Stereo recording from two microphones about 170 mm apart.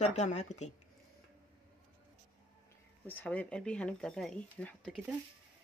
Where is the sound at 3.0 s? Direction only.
10° left (ahead or behind).